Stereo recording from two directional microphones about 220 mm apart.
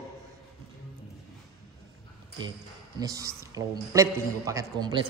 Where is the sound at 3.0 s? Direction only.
15° right (ahead or behind).